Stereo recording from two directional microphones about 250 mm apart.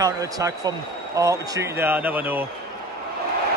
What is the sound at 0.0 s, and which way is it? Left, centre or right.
A man's voice, centre.